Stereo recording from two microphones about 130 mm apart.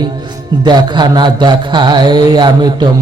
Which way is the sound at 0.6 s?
35° right (ahead or behind).